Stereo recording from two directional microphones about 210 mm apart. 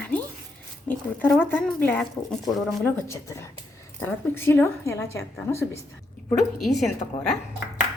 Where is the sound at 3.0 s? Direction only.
15° left (ahead or behind).